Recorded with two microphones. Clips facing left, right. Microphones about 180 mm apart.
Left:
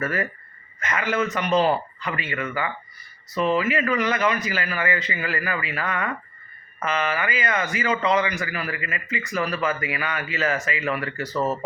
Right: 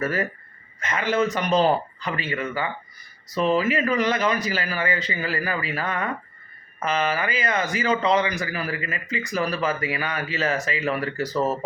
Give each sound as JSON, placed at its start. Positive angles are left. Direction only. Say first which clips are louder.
{"t": 0.0, "sound": "speech", "louder": "right 1 dB", "side_deg": -35}